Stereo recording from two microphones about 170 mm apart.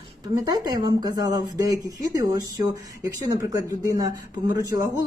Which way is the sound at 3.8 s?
20° right (ahead or behind).